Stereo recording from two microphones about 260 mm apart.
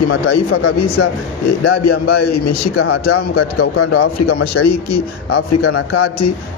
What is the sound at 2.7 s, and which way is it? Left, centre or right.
A man's voice, left.